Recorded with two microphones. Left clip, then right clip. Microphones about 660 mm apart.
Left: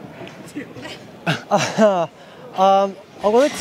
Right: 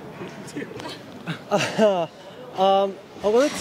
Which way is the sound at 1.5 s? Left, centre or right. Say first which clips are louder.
Left 3 dB; centre.